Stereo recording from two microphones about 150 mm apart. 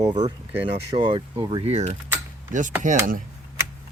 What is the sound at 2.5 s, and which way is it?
Speech, 55° right (ahead or behind).